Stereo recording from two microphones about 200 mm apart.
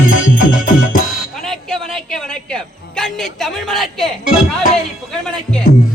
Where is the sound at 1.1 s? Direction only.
Centre (ahead or behind).